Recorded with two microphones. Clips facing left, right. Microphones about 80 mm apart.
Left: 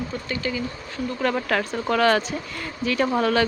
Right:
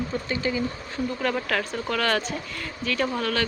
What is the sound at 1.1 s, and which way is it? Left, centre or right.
Speech, centre.